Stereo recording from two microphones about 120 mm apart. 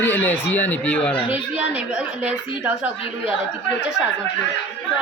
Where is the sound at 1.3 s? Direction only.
10° right (ahead or behind).